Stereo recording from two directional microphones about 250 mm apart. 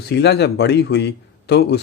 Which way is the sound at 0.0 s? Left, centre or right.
Left.